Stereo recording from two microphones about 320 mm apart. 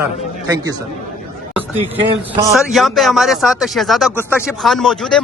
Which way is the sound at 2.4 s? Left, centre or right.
Centre.